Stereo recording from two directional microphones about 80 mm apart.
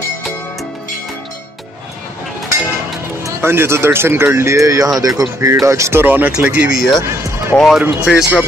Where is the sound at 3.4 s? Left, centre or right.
Right.